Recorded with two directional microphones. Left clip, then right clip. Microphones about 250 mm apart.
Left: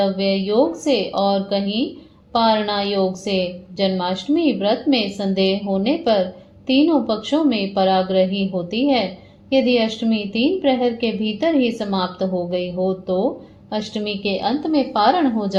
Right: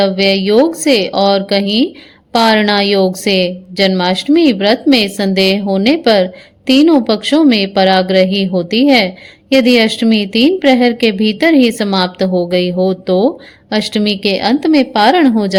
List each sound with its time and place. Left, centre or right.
0.0 s a woman's voice: right